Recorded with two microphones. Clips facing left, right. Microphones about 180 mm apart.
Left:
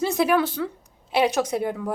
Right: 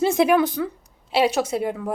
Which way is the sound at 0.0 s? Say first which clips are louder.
Right 3 dB; 20° right (ahead or behind).